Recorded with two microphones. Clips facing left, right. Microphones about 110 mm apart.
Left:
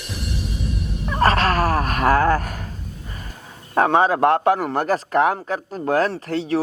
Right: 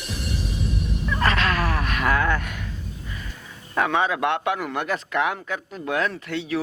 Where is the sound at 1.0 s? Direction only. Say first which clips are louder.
Left 5 dB; 40° left (ahead or behind).